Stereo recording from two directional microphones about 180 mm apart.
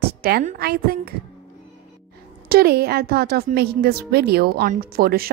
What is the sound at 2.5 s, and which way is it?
Speech, 60° right (ahead or behind).